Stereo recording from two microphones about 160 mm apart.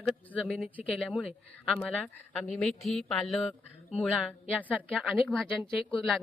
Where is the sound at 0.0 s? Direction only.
5° left (ahead or behind).